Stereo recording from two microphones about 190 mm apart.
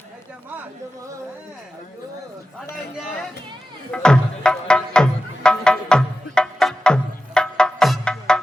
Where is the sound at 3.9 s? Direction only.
5° left (ahead or behind).